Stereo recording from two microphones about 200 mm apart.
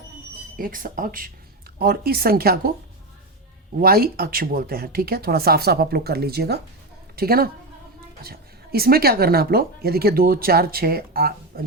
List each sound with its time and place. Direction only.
0.5 s speech: 45° right (ahead or behind)
3.8 s speech: 50° right (ahead or behind)